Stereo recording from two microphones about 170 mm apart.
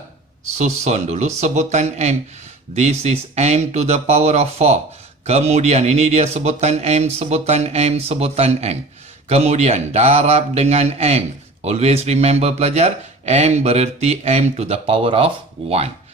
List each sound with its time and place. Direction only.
0.6 s speech: 40° right (ahead or behind)